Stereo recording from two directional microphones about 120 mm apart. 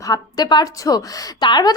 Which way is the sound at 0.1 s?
35° left (ahead or behind).